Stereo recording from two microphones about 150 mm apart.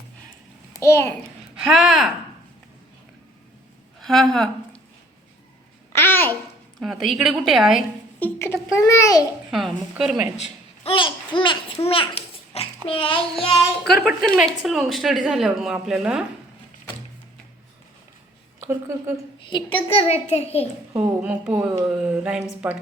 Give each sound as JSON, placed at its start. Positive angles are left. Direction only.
{"t": 0.7, "sound": "a child's voice", "side_deg": 20}
{"t": 4.0, "sound": "a woman's voice", "side_deg": 0}
{"t": 5.9, "sound": "babbling", "side_deg": 15}
{"t": 6.7, "sound": "speech", "side_deg": 0}
{"t": 8.2, "sound": "a child's voice", "side_deg": 15}
{"t": 9.5, "sound": "speech", "side_deg": 0}
{"t": 10.3, "sound": "a sound", "side_deg": 50}
{"t": 10.9, "sound": "babbling", "side_deg": 35}
{"t": 13.8, "sound": "speech", "side_deg": 0}
{"t": 18.7, "sound": "speech", "side_deg": -20}
{"t": 19.5, "sound": "a child's voice", "side_deg": 35}
{"t": 20.9, "sound": "speech", "side_deg": -10}